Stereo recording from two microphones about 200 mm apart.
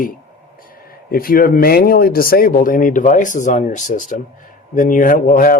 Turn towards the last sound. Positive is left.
turn(degrees=45)  # may be behind; listen again after turning